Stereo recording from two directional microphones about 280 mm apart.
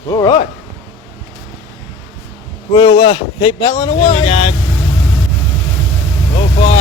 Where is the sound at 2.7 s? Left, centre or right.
Centre.